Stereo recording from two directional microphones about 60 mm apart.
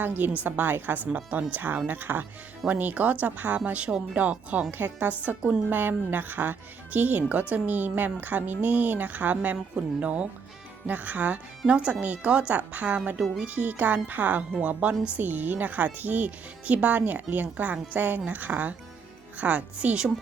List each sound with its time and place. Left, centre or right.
0.2 s speech: right
5.6 s speech: right
13.1 s speech: centre
13.4 s speech: right